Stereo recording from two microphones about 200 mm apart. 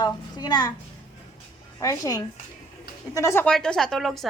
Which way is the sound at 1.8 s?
15° left (ahead or behind).